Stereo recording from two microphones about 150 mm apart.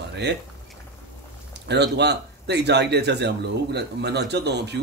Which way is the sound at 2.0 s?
90° right.